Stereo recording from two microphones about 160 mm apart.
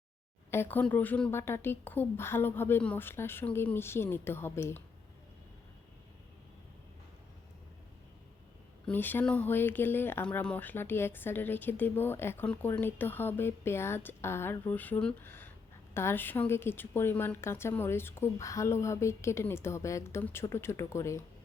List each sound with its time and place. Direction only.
0.5 s speech: 15° left (ahead or behind)
8.9 s speech: 10° left (ahead or behind)